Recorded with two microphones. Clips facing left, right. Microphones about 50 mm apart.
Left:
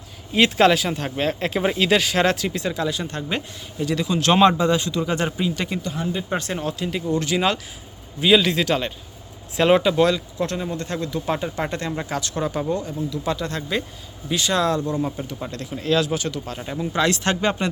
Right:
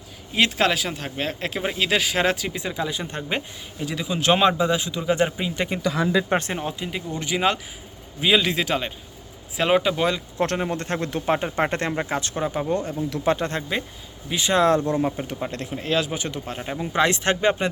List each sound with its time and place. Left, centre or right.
0.3 s speech: centre
10.3 s speech: right; by 12.7 s centre
13.2 s speech: right
14.3 s speech: centre
14.6 s speech: right; by 17.7 s centre